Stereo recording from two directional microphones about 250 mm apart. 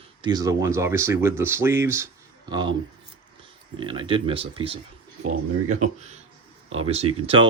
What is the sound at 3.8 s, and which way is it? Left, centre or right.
Speech, centre.